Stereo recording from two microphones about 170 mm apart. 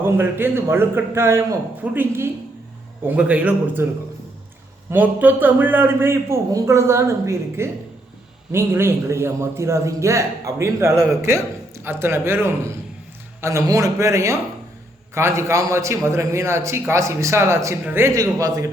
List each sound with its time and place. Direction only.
0.0 s a man's voice: 15° right (ahead or behind)
4.9 s a man's voice: 10° right (ahead or behind)